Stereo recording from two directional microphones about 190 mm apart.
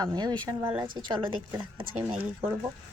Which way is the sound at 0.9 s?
20° right (ahead or behind).